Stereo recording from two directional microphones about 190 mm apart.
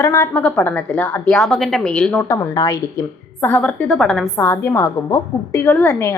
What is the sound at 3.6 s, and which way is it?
Speech, centre (ahead or behind).